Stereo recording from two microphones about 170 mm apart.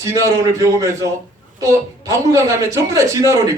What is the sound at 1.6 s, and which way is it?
Speech, 20° right (ahead or behind).